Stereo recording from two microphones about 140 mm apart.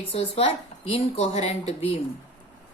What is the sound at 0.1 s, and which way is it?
A woman's voice, 40° left (ahead or behind).